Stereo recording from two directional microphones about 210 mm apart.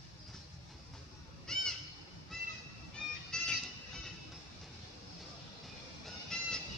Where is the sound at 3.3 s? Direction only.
5° left (ahead or behind).